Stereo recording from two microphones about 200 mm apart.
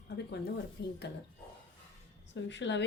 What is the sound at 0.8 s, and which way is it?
Speech, 55° left (ahead or behind).